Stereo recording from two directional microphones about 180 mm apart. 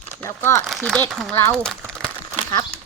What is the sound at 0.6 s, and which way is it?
Speech, centre (ahead or behind).